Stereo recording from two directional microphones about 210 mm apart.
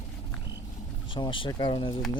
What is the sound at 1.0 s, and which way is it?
Speech, 25° left (ahead or behind).